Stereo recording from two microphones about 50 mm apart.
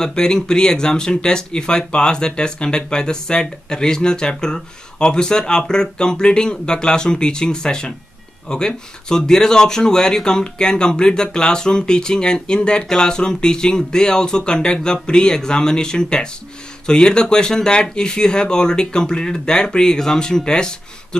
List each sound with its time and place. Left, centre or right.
0.0 s speech: centre